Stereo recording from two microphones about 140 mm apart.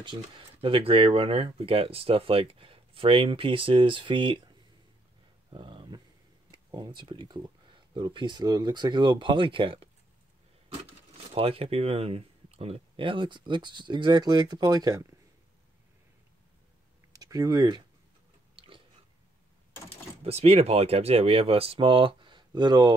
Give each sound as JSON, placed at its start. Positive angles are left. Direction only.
{"t": 0.0, "sound": "speech", "side_deg": -40}
{"t": 5.5, "sound": "a sound", "side_deg": -35}
{"t": 6.5, "sound": "speech", "side_deg": -30}
{"t": 11.3, "sound": "speech", "side_deg": -45}
{"t": 17.1, "sound": "speech", "side_deg": -25}
{"t": 20.2, "sound": "speech", "side_deg": -45}